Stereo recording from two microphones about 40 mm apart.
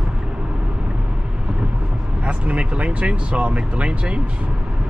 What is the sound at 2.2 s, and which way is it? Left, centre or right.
Speech, right.